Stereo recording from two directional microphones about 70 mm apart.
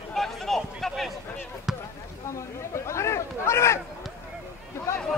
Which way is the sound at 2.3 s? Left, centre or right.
Left.